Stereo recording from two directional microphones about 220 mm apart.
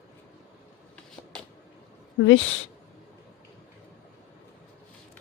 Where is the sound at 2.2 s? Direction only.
65° left (ahead or behind).